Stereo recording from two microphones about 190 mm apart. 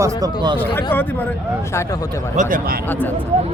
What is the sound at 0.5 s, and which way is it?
Speech, 10° left (ahead or behind).